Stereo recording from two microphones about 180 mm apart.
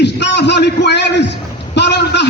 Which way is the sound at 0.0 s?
70° left (ahead or behind).